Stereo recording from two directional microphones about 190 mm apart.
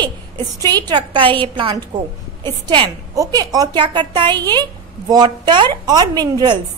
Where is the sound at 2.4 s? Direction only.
25° right (ahead or behind).